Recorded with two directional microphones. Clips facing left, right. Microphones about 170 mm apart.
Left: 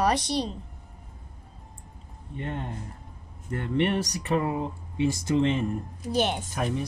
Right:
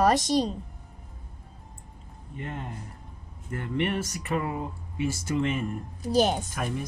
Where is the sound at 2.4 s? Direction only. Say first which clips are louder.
Left 3 dB; 30° left (ahead or behind).